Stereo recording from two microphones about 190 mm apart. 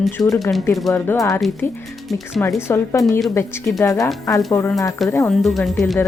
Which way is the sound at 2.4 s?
10° left (ahead or behind).